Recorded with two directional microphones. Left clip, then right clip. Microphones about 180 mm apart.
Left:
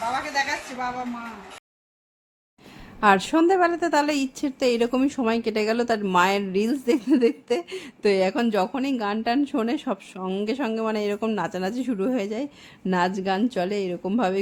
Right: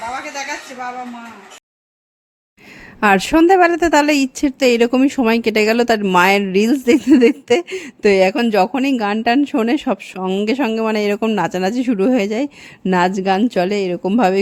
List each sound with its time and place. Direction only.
3.0 s speech: 40° right (ahead or behind)